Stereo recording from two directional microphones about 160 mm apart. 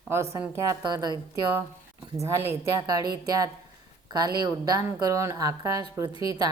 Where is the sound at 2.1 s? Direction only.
15° right (ahead or behind).